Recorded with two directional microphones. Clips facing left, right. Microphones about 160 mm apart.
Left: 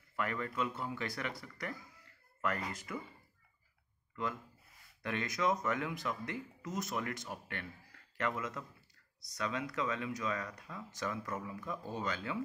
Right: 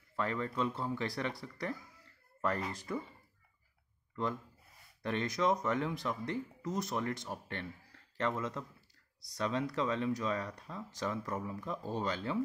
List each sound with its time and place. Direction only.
0.1 s speech: 25° right (ahead or behind)
5.0 s speech: 25° right (ahead or behind)
11.1 s speech: 15° right (ahead or behind)
11.4 s speech: 30° right (ahead or behind)